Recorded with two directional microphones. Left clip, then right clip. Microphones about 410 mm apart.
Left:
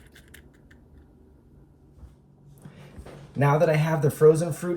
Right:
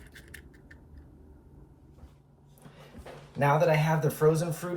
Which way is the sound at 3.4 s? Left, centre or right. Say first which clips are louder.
Left 2 dB; right.